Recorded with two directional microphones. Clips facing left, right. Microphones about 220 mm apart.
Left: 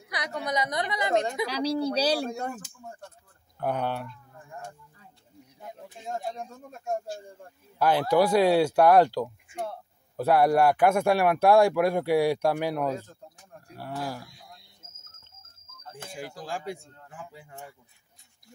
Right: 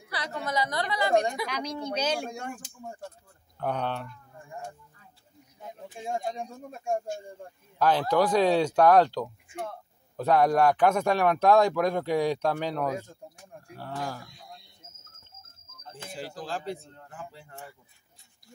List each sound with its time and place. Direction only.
0.1 s a sound: 15° left (ahead or behind)
0.5 s a woman's voice: 20° left (ahead or behind)
1.5 s speech: 35° left (ahead or behind)
3.5 s speech: 10° left (ahead or behind)
6.0 s speech: 10° right (ahead or behind)
7.8 s speech: 10° left (ahead or behind)
12.9 s speech: 10° right (ahead or behind)
13.7 s speech: 10° left (ahead or behind)
15.9 s speech: 15° left (ahead or behind)